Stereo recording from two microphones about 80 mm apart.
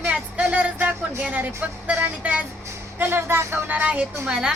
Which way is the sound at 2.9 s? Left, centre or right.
Right.